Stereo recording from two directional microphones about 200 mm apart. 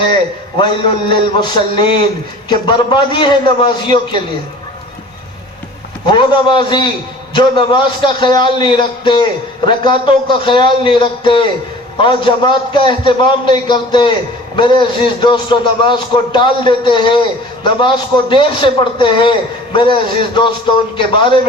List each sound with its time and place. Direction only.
0.6 s a man's voice: 25° left (ahead or behind)
6.1 s a man's voice: 25° left (ahead or behind)